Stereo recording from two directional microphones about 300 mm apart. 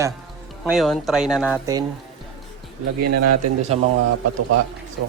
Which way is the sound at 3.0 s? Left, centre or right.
Right.